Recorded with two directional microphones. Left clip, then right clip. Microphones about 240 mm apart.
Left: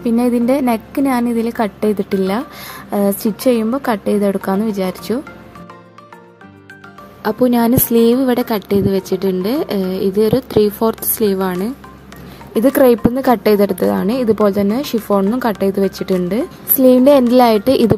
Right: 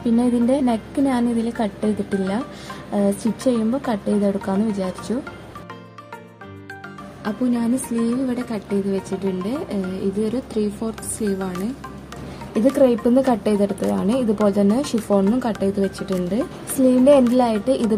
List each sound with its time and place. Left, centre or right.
0.2 s a woman's voice: left
7.2 s a woman's voice: left
12.7 s a woman's voice: left